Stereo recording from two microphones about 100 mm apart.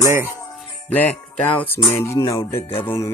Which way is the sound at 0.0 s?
25° right (ahead or behind).